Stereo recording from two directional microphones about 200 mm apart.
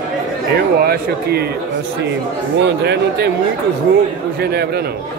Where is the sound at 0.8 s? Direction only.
55° right (ahead or behind).